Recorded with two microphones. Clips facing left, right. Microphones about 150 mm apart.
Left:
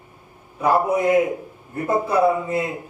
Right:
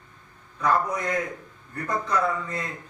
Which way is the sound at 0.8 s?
25° left (ahead or behind).